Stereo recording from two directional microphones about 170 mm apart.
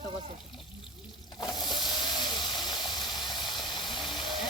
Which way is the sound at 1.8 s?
25° left (ahead or behind).